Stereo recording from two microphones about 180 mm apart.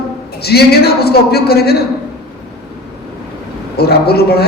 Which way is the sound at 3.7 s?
60° left (ahead or behind).